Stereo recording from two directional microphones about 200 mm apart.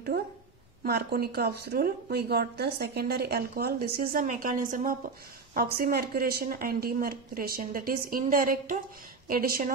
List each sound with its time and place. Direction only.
0.1 s a woman's voice: 55° right (ahead or behind)